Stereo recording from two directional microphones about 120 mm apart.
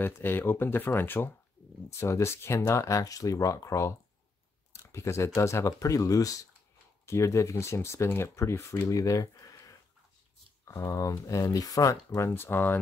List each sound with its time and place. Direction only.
0.0 s speech: 15° left (ahead or behind)